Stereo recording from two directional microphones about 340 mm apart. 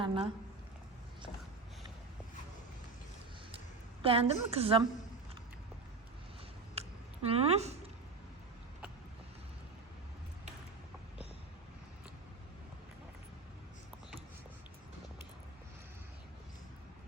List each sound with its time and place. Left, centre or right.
0.0 s a woman's voice: centre
4.0 s a woman's voice: centre
6.8 s a sound: centre
7.3 s a woman's voice: centre